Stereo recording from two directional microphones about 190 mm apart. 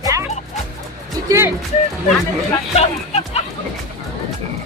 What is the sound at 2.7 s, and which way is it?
Speech, 30° left (ahead or behind).